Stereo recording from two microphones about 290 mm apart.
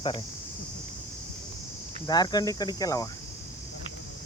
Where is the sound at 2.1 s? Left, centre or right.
Centre.